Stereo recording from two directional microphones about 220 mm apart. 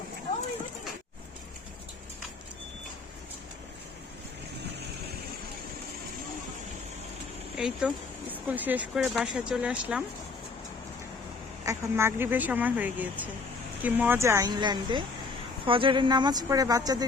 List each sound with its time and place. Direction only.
7.5 s speech: 5° right (ahead or behind)
11.6 s speech: 15° right (ahead or behind)